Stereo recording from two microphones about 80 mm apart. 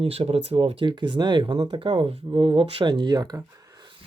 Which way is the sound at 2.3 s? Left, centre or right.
Right.